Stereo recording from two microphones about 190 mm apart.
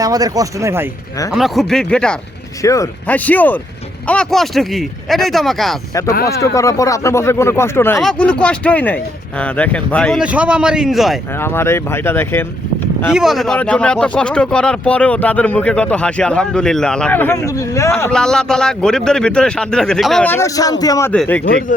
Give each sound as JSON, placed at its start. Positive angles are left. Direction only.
{"t": 0.0, "sound": "speech", "side_deg": -20}
{"t": 1.3, "sound": "speech", "side_deg": 0}
{"t": 2.6, "sound": "speech", "side_deg": 15}
{"t": 5.9, "sound": "speech", "side_deg": 15}
{"t": 11.3, "sound": "speech", "side_deg": 10}
{"t": 13.1, "sound": "speech", "side_deg": 0}
{"t": 18.0, "sound": "speech", "side_deg": 5}
{"t": 21.1, "sound": "speech", "side_deg": 10}